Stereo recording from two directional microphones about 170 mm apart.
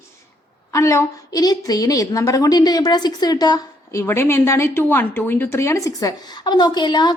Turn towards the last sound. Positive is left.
turn(degrees=25)  # may be behind; listen again after turning